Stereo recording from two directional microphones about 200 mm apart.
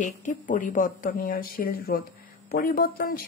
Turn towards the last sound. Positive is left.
turn(degrees=45)  # may be behind; listen again after turning